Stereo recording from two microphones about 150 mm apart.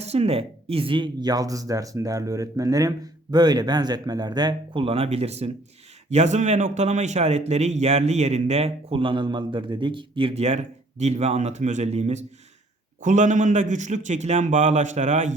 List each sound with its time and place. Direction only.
0.0 s a man's voice: 45° right (ahead or behind)